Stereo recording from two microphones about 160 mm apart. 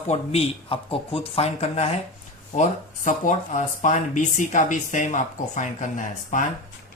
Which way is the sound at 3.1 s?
50° left (ahead or behind).